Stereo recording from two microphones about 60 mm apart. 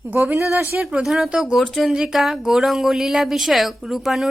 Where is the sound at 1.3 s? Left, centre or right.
Centre.